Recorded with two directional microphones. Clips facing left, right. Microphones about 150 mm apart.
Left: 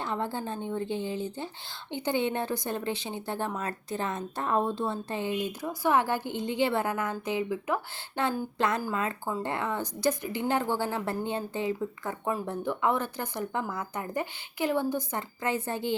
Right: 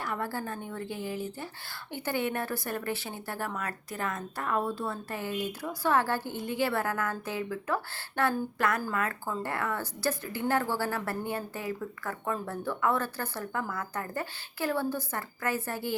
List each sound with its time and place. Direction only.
0.0 s a woman's voice: 20° left (ahead or behind)